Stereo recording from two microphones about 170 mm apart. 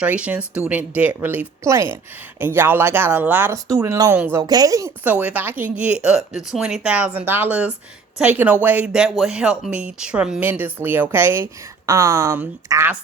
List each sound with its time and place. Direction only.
0.0 s speech: 10° right (ahead or behind)